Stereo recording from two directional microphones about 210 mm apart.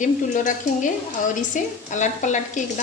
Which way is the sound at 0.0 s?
35° left (ahead or behind).